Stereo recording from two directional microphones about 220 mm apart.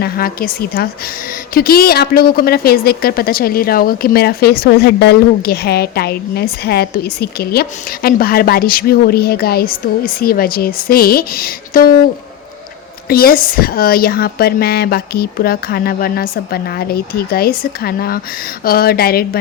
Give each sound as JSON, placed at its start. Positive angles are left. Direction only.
{"t": 0.0, "sound": "a woman's voice", "side_deg": 40}
{"t": 13.1, "sound": "a woman's voice", "side_deg": 45}